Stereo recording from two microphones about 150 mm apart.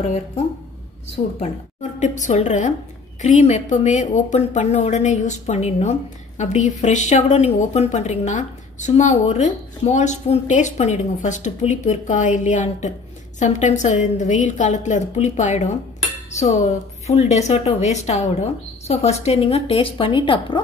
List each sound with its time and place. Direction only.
1.1 s a woman's voice: 50° left (ahead or behind)